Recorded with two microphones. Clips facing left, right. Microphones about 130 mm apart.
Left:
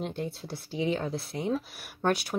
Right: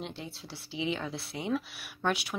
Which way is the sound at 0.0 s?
50° left (ahead or behind).